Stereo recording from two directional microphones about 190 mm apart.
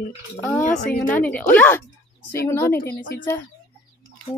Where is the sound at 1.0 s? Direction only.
10° left (ahead or behind).